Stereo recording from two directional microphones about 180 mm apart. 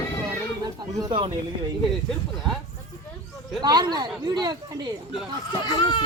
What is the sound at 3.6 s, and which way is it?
Speech, 25° right (ahead or behind).